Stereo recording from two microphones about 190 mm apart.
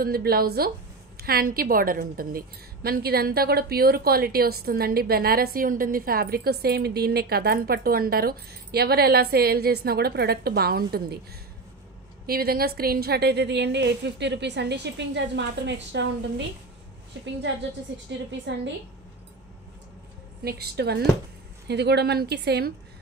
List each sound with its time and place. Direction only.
0.0 s a woman's voice: 55° right (ahead or behind)
12.3 s a woman's voice: 50° right (ahead or behind); by 18.0 s 70° right (ahead or behind)
20.4 s a woman's voice: 55° right (ahead or behind)